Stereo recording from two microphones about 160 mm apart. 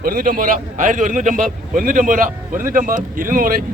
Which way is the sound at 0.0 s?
65° right (ahead or behind).